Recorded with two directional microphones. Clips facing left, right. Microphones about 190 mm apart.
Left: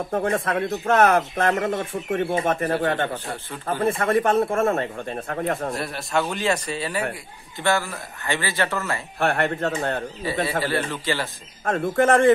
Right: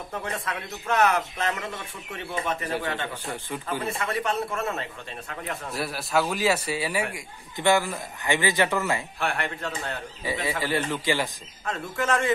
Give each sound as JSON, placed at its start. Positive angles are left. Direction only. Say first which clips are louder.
{"t": 0.1, "sound": "a man's voice", "louder": "left 9 dB", "side_deg": 50}
{"t": 5.8, "sound": "a man's voice", "louder": "left 1 dB", "side_deg": 0}
{"t": 9.2, "sound": "a man's voice", "louder": "left 7 dB", "side_deg": 50}
{"t": 10.6, "sound": "speech", "louder": "left 2 dB", "side_deg": -15}
{"t": 11.6, "sound": "a man's voice", "louder": "left 9 dB", "side_deg": 50}